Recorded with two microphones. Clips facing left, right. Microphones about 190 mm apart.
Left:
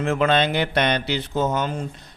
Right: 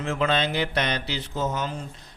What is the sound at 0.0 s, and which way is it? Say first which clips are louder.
Speech: left 5 dB; 60° left (ahead or behind).